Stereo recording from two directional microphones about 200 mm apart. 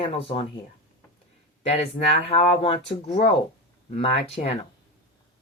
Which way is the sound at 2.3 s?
25° left (ahead or behind).